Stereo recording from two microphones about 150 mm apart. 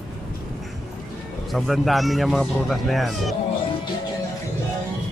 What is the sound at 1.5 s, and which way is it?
Speech, centre (ahead or behind).